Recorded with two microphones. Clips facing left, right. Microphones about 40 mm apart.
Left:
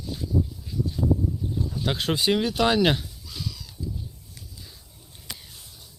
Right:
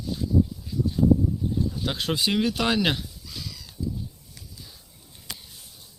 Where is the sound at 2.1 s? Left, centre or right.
Left.